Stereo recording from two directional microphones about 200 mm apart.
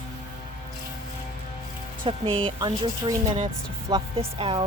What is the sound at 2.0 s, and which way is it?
Speech, 25° right (ahead or behind).